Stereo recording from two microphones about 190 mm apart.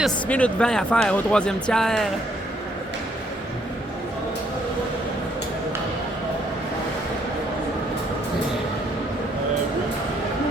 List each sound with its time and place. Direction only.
0.0 s speech: 5° left (ahead or behind)